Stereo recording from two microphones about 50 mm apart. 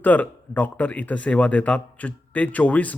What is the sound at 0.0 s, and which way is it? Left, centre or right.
A man's voice, left.